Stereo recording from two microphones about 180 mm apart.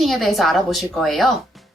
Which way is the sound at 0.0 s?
Centre (ahead or behind).